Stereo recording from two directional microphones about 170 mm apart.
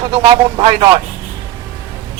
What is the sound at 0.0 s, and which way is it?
A man's voice, 30° right (ahead or behind).